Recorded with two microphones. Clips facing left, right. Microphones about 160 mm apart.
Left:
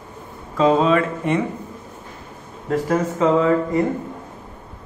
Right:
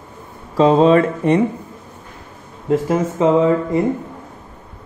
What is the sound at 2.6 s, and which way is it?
Speech, 20° right (ahead or behind).